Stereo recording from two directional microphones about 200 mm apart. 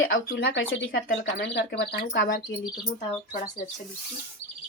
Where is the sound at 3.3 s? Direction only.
40° left (ahead or behind).